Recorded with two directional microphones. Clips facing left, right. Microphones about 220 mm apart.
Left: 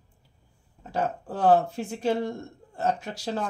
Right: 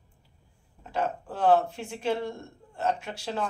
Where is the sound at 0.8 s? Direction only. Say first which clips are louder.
Left 1 dB; 40° left (ahead or behind).